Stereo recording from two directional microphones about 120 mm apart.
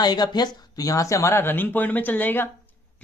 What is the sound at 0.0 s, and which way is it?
A man's voice, 35° left (ahead or behind).